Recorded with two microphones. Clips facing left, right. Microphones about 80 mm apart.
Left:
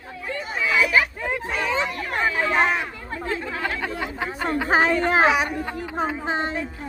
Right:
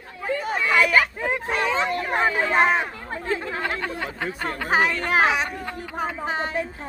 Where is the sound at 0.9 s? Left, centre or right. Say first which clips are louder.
Right 1 dB; centre.